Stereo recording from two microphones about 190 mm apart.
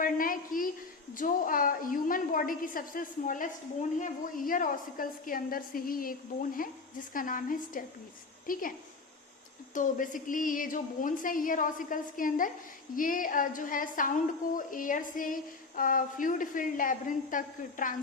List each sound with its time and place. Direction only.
0.0 s a sound: 45° left (ahead or behind)
1.1 s a woman's voice: 45° left (ahead or behind)
9.7 s a woman's voice: 45° left (ahead or behind)